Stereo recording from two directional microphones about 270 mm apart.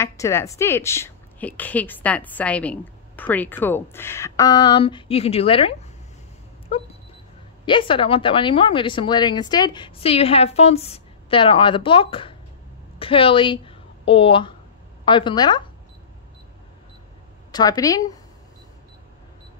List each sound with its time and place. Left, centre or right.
0.0 s a woman's voice: centre
6.7 s a sound: left
7.6 s a woman's voice: centre
17.5 s a woman's voice: centre